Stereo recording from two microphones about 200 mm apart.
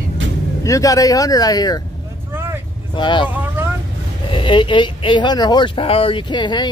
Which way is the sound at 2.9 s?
25° left (ahead or behind).